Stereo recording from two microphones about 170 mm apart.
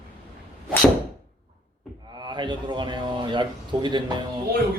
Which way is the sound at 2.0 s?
25° right (ahead or behind).